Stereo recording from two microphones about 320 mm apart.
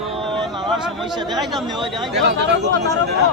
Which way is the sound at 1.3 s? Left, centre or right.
Centre.